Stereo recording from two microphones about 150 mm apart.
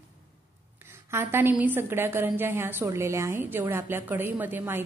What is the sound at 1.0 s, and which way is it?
A woman's voice, 15° right (ahead or behind).